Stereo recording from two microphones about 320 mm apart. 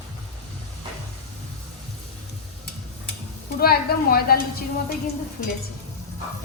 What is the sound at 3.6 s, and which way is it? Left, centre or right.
Speech, left.